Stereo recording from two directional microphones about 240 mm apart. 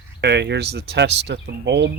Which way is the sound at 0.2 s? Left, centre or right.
Right.